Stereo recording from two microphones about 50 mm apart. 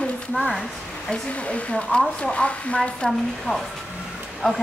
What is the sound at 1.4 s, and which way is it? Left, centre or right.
Speech, left.